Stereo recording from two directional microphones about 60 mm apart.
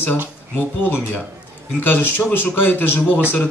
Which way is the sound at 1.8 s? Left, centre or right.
Left.